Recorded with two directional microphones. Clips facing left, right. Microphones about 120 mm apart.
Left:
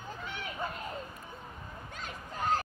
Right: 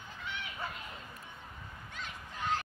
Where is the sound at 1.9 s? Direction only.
40° left (ahead or behind).